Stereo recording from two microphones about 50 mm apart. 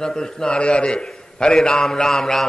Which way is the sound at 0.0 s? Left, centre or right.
Centre.